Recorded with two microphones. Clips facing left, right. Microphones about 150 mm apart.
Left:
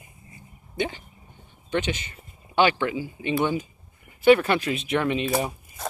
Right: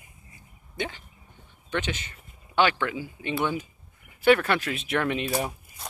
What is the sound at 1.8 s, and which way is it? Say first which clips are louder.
Speech: left 3 dB; 5° left (ahead or behind).